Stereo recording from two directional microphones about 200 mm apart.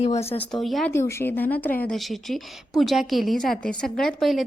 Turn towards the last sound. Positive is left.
turn(degrees=0)  # may be behind; listen again after turning